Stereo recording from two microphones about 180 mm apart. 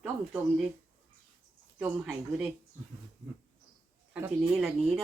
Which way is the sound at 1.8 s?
5° right (ahead or behind).